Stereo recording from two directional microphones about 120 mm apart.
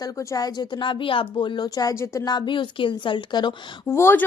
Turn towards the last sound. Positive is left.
turn(degrees=20)  # may be behind; listen again after turning